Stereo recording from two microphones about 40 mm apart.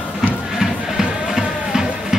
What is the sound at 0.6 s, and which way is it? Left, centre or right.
Music, centre.